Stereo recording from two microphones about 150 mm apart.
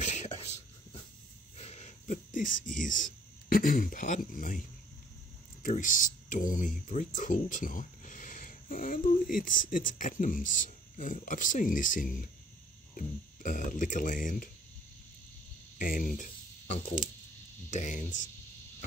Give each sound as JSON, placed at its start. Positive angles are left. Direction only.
{"t": 0.0, "sound": "whispering", "side_deg": 50}
{"t": 1.6, "sound": "speech", "side_deg": 45}
{"t": 5.6, "sound": "speech", "side_deg": 65}
{"t": 15.8, "sound": "speech", "side_deg": 65}
{"t": 17.6, "sound": "speech", "side_deg": 55}